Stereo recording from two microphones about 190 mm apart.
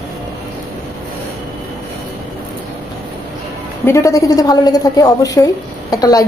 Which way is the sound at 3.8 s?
15° left (ahead or behind).